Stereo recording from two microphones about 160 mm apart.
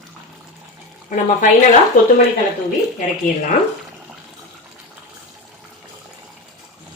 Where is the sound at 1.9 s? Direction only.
60° left (ahead or behind).